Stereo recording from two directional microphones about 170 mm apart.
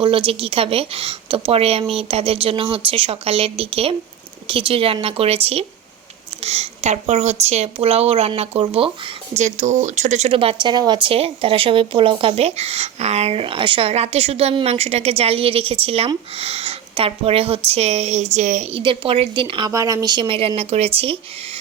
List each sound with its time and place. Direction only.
0.0 s speech: 30° right (ahead or behind)
9.3 s speech: 45° right (ahead or behind)